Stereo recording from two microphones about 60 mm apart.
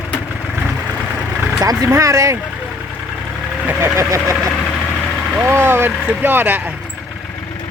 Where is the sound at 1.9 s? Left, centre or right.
Right.